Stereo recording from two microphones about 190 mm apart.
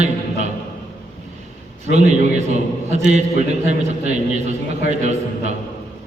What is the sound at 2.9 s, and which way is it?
A man's voice, 40° right (ahead or behind).